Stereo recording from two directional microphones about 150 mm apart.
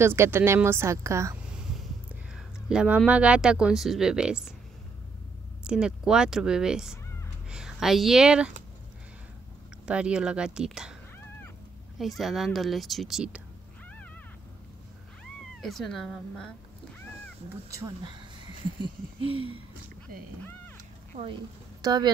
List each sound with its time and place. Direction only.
0.0 s a woman's voice: 15° right (ahead or behind)
2.3 s a sound: 5° right (ahead or behind)
3.1 s a woman's voice: 10° right (ahead or behind)
5.6 s a woman's voice: 5° right (ahead or behind)
9.8 s a woman's voice: 5° right (ahead or behind)
12.0 s a woman's voice: centre (ahead or behind)
15.2 s speech: 5° left (ahead or behind)
18.8 s a sound: 35° right (ahead or behind)
21.8 s speech: 25° right (ahead or behind)